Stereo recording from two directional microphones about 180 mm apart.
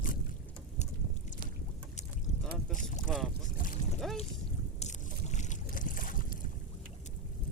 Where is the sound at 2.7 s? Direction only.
45° left (ahead or behind).